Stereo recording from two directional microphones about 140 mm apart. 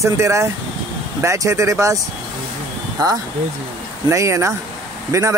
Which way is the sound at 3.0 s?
30° right (ahead or behind).